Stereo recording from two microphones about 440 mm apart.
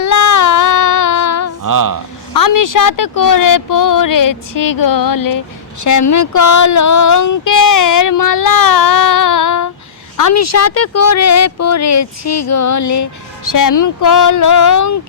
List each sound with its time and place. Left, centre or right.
0.0 s child singing: left
1.6 s a sound: right
2.3 s speech: left